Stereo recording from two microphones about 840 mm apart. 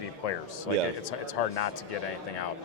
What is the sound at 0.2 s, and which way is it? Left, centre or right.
Speech, left.